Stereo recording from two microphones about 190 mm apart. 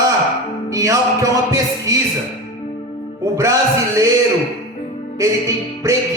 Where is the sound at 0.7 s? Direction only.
15° right (ahead or behind).